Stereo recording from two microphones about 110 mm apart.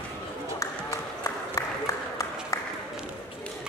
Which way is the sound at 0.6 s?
30° left (ahead or behind).